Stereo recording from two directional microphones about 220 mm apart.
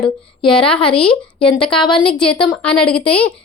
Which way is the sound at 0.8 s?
25° left (ahead or behind).